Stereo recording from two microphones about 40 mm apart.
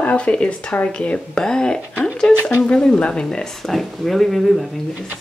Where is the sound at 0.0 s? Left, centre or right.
Left.